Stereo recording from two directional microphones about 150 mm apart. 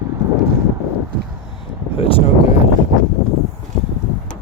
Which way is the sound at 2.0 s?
40° left (ahead or behind).